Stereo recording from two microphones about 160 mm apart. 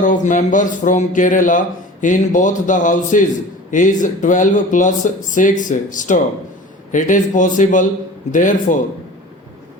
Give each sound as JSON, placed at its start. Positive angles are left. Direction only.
{"t": 0.0, "sound": "speech", "side_deg": 50}